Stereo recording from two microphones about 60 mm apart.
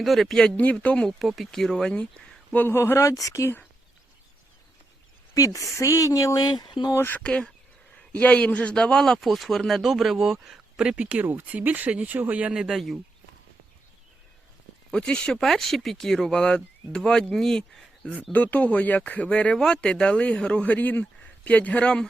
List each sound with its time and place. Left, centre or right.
0.0 s speech: centre
0.5 s speech: left
1.5 s speech: centre
2.6 s speech: left
5.3 s speech: left
7.2 s a man's voice: centre
11.0 s speech: right
12.1 s speech: right
12.5 s speech: centre
14.9 s a man's voice: centre
15.4 s a man's voice: centre
18.3 s speech: left